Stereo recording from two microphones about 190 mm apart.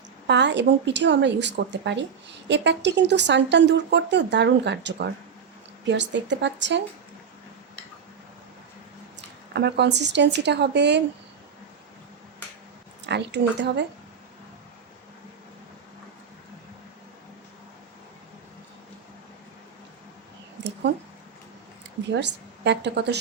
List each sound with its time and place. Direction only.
0.3 s a woman's voice: 65° right (ahead or behind)
9.5 s speech: 60° right (ahead or behind)
13.1 s speech: 65° right (ahead or behind)
20.6 s a sound: 70° right (ahead or behind)
22.1 s speech: 65° right (ahead or behind)